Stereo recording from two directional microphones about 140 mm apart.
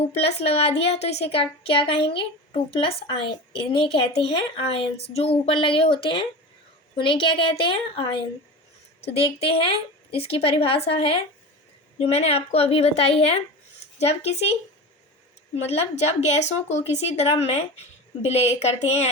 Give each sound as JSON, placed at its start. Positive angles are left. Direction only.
{"t": 0.1, "sound": "a woman's voice", "side_deg": 45}
{"t": 15.5, "sound": "speech", "side_deg": 50}